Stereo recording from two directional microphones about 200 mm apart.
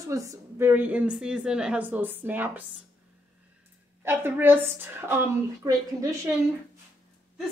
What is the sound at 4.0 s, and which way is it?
Speech, 10° right (ahead or behind).